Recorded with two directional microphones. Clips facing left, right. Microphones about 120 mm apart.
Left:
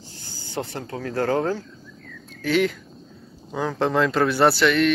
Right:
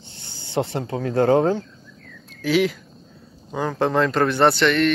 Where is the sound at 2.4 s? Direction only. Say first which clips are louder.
Right 2 dB; 5° right (ahead or behind).